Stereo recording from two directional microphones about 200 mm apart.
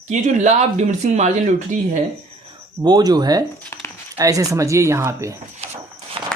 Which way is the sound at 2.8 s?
20° right (ahead or behind).